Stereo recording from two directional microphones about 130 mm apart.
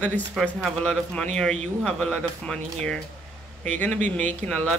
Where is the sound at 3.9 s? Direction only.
65° right (ahead or behind).